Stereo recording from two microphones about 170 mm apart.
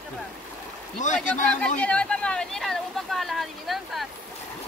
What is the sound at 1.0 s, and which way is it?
Speech, 50° left (ahead or behind).